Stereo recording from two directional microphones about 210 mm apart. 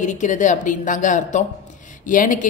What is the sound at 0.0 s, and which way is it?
A woman's voice, 35° left (ahead or behind).